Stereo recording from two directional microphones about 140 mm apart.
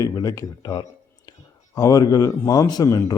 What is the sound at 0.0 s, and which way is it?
A man's voice, 25° left (ahead or behind).